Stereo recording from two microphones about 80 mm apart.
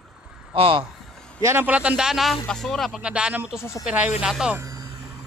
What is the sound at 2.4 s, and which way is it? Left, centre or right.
Speech, centre.